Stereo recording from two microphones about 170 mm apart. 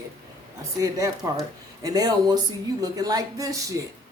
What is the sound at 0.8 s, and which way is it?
A woman's voice, 20° right (ahead or behind).